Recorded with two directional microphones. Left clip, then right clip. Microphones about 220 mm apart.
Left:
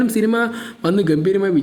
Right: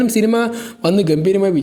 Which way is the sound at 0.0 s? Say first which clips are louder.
Right 2 dB; 15° right (ahead or behind).